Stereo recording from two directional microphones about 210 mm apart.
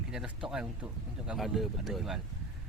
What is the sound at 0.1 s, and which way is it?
Speech, centre (ahead or behind).